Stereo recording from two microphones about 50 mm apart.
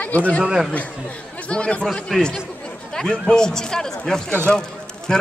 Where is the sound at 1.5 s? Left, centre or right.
Left.